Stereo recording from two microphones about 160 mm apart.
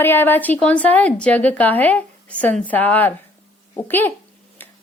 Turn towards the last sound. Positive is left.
turn(degrees=10)  # may be behind; listen again after turning